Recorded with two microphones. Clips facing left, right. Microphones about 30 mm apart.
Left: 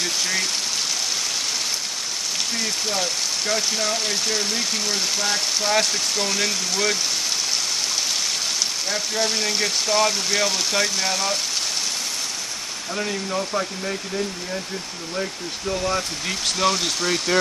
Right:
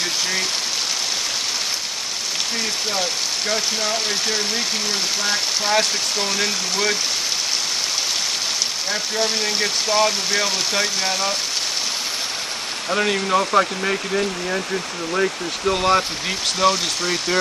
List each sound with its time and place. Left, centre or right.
2.9 s speech: centre
8.9 s speech: centre
12.9 s speech: right
15.6 s speech: right
16.3 s speech: centre